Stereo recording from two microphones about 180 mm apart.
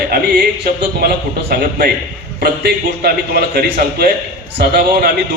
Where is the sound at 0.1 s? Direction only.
55° right (ahead or behind).